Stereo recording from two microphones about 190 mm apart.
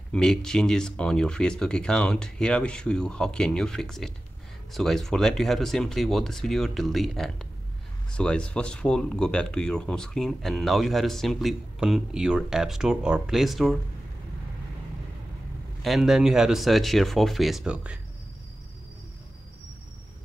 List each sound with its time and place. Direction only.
0.1 s speech: 5° left (ahead or behind)
15.8 s speech: centre (ahead or behind)